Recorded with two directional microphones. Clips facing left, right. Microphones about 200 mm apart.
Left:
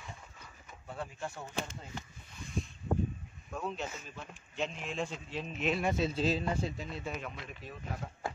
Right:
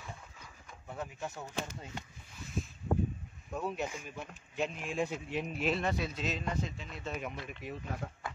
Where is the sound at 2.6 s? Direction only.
Centre (ahead or behind).